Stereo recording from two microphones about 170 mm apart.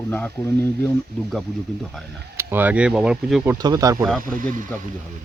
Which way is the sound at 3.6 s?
20° right (ahead or behind).